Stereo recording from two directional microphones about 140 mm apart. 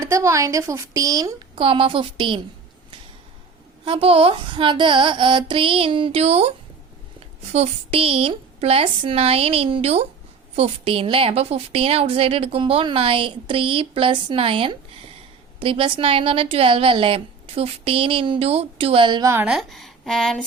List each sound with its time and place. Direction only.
0.0 s speech: 20° right (ahead or behind)
1.5 s a woman's voice: 40° right (ahead or behind)
3.8 s a woman's voice: 40° right (ahead or behind)
7.5 s a woman's voice: 45° right (ahead or behind)
19.2 s speech: 20° right (ahead or behind)
19.5 s speech: centre (ahead or behind)